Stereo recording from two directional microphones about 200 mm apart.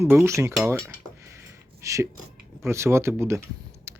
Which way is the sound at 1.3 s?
15° right (ahead or behind).